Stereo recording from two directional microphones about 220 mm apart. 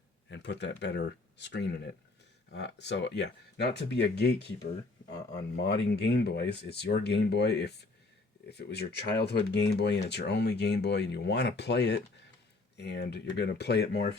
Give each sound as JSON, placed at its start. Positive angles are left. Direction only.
{"t": 0.3, "sound": "speech", "side_deg": 50}
{"t": 5.5, "sound": "speech", "side_deg": 50}